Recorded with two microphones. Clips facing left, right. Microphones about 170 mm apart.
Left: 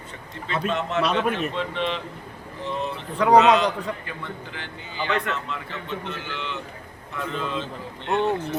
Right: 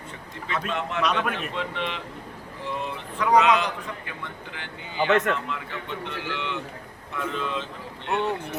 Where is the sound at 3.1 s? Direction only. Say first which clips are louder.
Left 4 dB; 35° left (ahead or behind).